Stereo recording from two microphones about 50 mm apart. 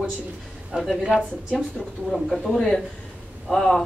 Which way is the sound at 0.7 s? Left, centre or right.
Right.